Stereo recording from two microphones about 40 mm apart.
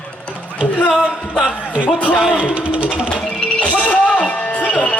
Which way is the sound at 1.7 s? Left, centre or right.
Right.